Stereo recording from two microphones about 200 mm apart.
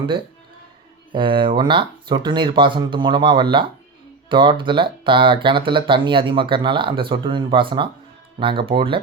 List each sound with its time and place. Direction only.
1.1 s speech: 25° right (ahead or behind)